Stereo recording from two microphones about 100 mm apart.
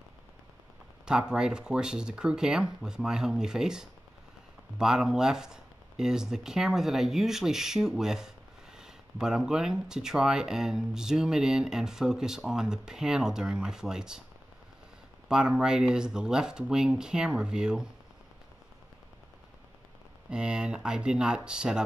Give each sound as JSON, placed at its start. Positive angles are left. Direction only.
{"t": 1.3, "sound": "speech", "side_deg": -10}
{"t": 15.2, "sound": "speech", "side_deg": -5}
{"t": 20.2, "sound": "speech", "side_deg": -10}